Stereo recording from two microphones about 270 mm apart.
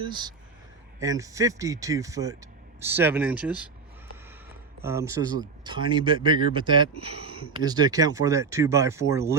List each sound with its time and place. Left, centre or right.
0.0 s speech: centre
4.8 s speech: centre